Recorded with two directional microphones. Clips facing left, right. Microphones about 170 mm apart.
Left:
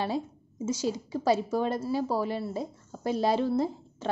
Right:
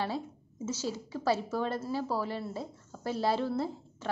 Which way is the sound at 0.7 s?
15° left (ahead or behind).